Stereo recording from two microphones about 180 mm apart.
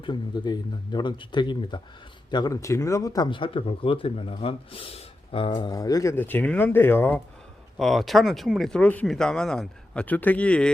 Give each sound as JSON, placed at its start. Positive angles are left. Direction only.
{"t": 0.0, "sound": "speech", "side_deg": 25}
{"t": 7.8, "sound": "speech", "side_deg": 0}